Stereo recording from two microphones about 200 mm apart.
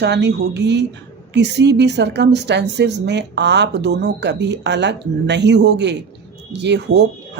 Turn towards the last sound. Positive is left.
turn(degrees=-60)  # may be behind; listen again after turning